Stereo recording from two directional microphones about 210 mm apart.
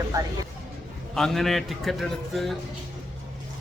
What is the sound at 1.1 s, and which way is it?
A man's voice, centre (ahead or behind).